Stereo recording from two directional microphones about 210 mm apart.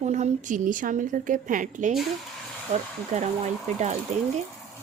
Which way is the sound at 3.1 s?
30° right (ahead or behind).